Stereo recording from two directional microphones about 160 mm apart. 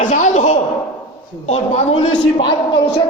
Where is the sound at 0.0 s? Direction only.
50° left (ahead or behind).